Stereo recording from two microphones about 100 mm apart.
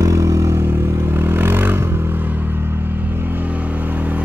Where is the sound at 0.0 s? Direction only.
35° right (ahead or behind).